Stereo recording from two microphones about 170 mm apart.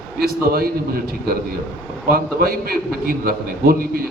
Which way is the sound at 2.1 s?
60° right (ahead or behind).